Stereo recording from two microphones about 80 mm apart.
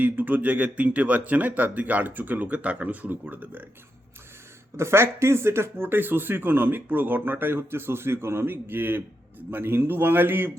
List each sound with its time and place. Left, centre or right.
0.0 s speech: right
4.8 s speech: right